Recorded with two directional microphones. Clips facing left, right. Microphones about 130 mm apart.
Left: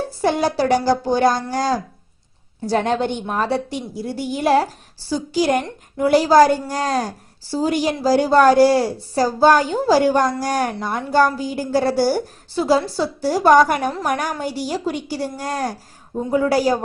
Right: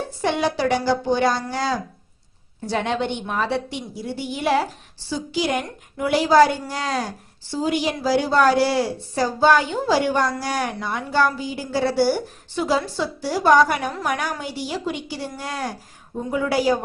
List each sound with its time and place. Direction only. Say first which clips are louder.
0.2 s a woman's voice: left 3 dB; 40° left (ahead or behind)